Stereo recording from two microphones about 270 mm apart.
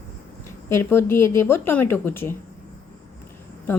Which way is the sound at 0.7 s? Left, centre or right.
Centre.